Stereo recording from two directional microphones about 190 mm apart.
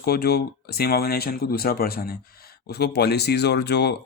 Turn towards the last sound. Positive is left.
turn(degrees=60)  # may be behind; listen again after turning